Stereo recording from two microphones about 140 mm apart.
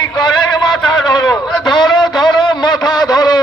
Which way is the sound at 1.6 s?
30° left (ahead or behind).